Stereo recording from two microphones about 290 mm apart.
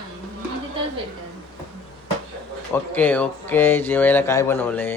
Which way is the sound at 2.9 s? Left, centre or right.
Centre.